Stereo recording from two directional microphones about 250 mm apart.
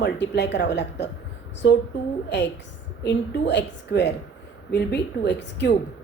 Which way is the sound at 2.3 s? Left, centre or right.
Left.